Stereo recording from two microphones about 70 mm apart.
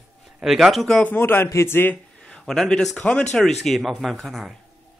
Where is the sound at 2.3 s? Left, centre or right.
Centre.